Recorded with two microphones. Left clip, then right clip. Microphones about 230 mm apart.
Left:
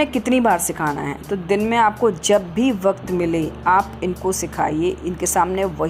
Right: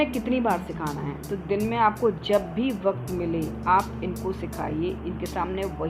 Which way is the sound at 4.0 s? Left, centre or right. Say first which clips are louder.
Left 8 dB; left.